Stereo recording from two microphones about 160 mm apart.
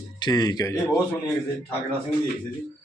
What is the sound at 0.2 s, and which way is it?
Speech, 25° left (ahead or behind).